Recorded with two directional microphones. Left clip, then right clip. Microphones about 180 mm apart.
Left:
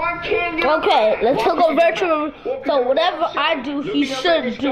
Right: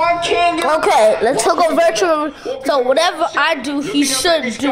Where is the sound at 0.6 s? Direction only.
25° right (ahead or behind).